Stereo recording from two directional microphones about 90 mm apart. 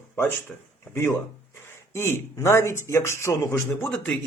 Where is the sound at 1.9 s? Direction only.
30° left (ahead or behind).